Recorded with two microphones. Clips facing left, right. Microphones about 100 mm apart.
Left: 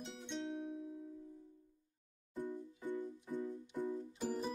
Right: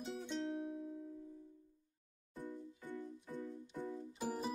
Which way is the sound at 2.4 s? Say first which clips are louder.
Left 4 dB; 20° left (ahead or behind).